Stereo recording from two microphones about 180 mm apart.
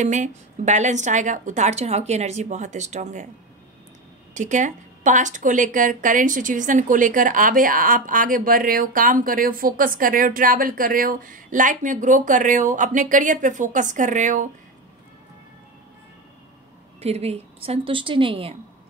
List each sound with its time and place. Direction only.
0.0 s a woman's voice: 45° right (ahead or behind)
4.3 s speech: 45° right (ahead or behind)
17.0 s a woman's voice: 35° right (ahead or behind)